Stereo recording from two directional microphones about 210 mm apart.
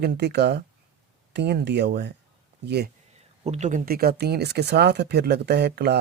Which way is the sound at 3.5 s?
35° right (ahead or behind).